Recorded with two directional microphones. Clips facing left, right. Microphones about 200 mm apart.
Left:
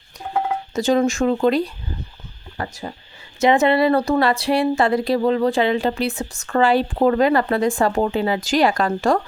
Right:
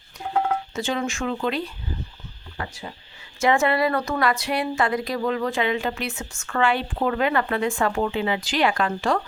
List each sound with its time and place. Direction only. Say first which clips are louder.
0.7 s speech: left 9 dB; 40° left (ahead or behind)
3.4 s speech: left 5 dB; 20° left (ahead or behind); by 9.2 s 45° left (ahead or behind)